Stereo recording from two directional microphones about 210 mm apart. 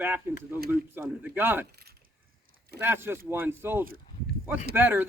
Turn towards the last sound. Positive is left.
turn(degrees=-10)  # may be behind; listen again after turning